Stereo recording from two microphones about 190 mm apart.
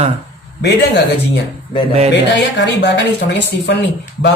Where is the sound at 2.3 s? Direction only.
70° left (ahead or behind).